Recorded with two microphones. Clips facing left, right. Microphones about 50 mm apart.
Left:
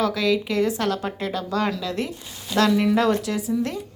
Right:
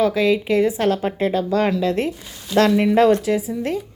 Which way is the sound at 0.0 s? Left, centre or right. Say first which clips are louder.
Right 4 dB; right.